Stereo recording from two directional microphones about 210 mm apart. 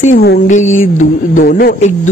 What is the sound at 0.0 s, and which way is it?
Speech, 35° left (ahead or behind).